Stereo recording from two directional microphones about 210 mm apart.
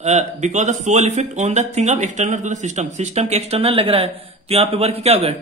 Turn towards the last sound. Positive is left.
turn(degrees=-30)  # may be behind; listen again after turning